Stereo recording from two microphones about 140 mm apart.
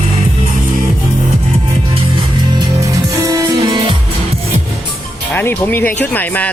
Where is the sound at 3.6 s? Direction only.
35° right (ahead or behind).